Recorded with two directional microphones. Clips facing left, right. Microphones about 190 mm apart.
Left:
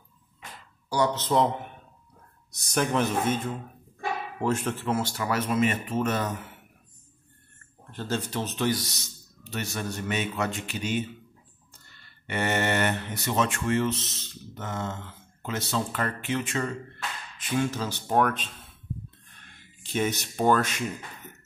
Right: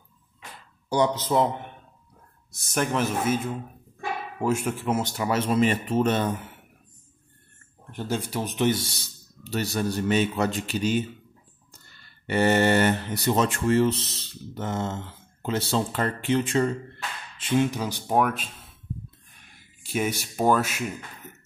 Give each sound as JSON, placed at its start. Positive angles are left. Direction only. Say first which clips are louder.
{"t": 0.8, "sound": "speech", "louder": "right 3 dB", "side_deg": -20}
{"t": 1.3, "sound": "speech", "louder": "right 1 dB", "side_deg": 0}
{"t": 2.7, "sound": "a man's voice", "louder": "even", "side_deg": 0}
{"t": 7.9, "sound": "speech", "louder": "right 2 dB", "side_deg": -15}
{"t": 12.3, "sound": "speech", "louder": "right 6 dB", "side_deg": -35}
{"t": 17.6, "sound": "speech", "louder": "right 2 dB", "side_deg": -15}
{"t": 19.0, "sound": "a sound", "louder": "even", "side_deg": -10}